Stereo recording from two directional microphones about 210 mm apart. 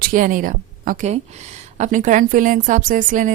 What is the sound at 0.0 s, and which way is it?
A woman's voice, 40° right (ahead or behind).